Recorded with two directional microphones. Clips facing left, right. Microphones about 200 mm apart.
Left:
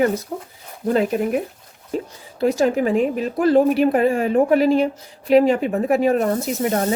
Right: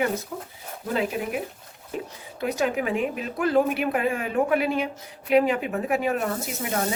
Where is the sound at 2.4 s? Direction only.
35° left (ahead or behind).